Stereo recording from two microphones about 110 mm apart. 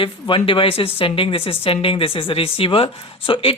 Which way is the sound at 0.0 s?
50° left (ahead or behind).